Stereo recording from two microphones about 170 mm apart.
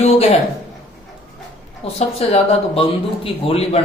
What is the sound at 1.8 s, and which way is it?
Speech, 35° left (ahead or behind).